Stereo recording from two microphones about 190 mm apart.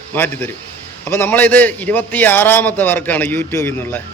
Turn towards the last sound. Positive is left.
turn(degrees=10)  # may be behind; listen again after turning